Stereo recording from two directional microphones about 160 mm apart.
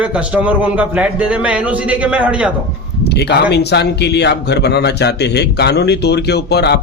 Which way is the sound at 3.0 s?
90° left.